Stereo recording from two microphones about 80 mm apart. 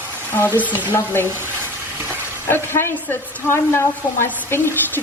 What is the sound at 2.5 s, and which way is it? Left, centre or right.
Speech, left.